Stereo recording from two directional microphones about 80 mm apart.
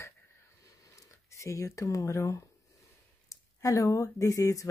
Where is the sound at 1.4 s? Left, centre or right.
Left.